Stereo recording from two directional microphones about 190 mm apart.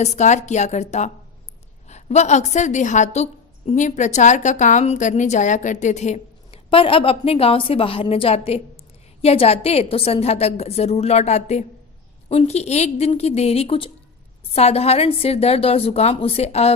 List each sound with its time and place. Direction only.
0.0 s a woman's voice: 35° left (ahead or behind)